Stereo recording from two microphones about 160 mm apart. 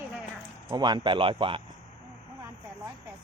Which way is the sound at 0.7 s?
25° right (ahead or behind).